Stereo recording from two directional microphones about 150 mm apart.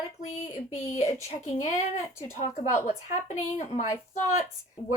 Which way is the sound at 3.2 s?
50° left (ahead or behind).